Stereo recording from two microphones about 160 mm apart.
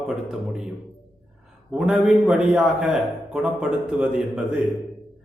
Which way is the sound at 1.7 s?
5° right (ahead or behind).